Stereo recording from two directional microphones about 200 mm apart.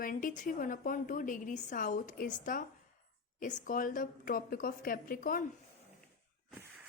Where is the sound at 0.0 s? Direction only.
45° left (ahead or behind).